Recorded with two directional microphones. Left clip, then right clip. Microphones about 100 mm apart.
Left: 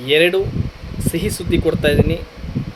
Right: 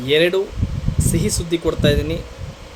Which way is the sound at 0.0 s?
20° right (ahead or behind).